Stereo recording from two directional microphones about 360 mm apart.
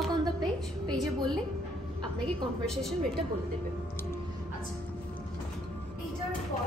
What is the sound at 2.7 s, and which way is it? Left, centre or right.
Speech, centre.